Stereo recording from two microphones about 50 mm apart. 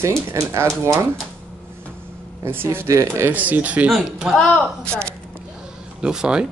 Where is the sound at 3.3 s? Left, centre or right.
Right.